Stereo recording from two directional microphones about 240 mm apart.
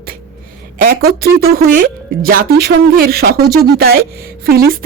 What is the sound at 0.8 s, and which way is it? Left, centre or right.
Speech, right.